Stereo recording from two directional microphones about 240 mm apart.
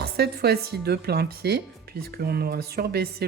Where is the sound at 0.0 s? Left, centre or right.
Right.